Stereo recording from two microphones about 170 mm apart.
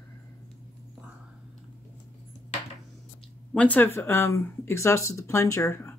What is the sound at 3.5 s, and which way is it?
Speech, 10° left (ahead or behind).